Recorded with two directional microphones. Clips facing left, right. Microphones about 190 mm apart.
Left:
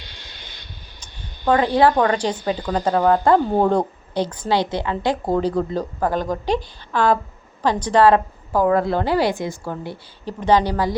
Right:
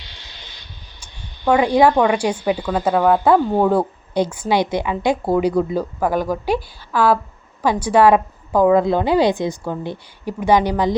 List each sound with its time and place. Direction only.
0.9 s a woman's voice: 10° right (ahead or behind)